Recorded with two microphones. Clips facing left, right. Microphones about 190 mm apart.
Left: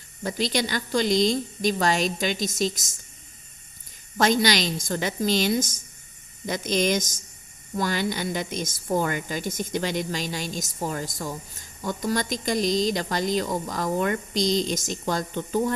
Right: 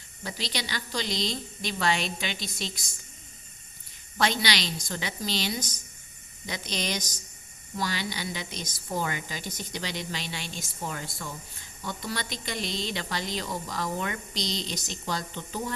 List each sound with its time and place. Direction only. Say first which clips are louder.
0.2 s a woman's voice: left 9 dB; 50° left (ahead or behind)
4.2 s a woman's voice: left 6 dB; 45° left (ahead or behind)